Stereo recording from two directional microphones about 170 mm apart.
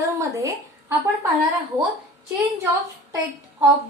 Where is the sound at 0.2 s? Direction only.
20° right (ahead or behind).